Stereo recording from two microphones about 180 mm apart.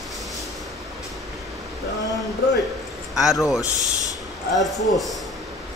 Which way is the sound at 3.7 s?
40° right (ahead or behind).